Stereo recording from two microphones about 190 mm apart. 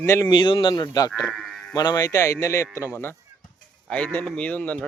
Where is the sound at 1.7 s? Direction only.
20° left (ahead or behind).